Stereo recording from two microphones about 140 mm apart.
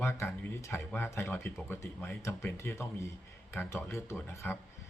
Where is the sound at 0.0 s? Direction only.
15° left (ahead or behind).